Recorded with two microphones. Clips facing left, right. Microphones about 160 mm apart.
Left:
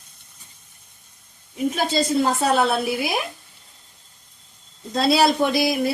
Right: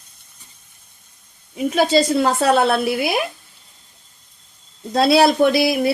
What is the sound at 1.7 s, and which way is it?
Speech, 75° right (ahead or behind).